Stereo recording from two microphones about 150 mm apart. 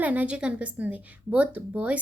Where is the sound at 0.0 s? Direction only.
10° right (ahead or behind).